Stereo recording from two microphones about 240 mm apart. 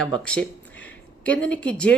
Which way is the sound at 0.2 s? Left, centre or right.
Centre.